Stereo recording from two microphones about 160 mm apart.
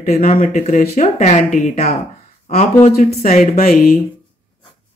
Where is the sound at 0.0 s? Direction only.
45° left (ahead or behind).